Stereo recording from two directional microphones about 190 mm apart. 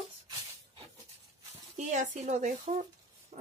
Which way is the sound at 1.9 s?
40° right (ahead or behind).